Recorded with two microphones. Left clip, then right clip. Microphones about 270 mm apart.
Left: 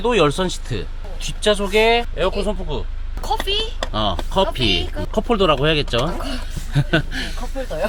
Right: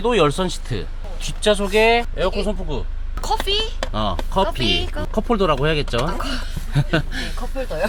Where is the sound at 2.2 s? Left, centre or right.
Left.